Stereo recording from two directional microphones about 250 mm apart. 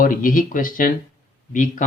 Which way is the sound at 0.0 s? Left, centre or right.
Left.